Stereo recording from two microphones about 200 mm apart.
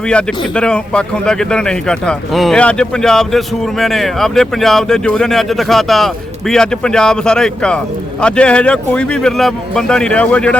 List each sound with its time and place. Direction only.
0.1 s speech: 5° left (ahead or behind)